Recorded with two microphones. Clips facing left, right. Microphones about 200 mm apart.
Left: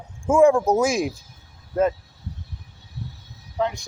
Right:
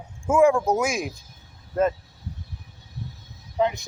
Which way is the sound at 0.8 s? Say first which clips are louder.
Left 5 dB; 25° left (ahead or behind).